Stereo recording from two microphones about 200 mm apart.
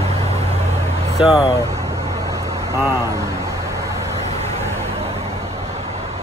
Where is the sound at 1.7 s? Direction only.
15° right (ahead or behind).